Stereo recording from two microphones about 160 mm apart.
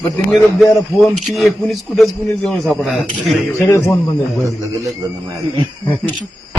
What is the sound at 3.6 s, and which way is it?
Speech, 15° left (ahead or behind).